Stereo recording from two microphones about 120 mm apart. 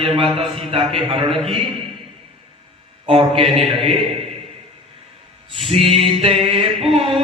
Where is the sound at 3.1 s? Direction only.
50° right (ahead or behind).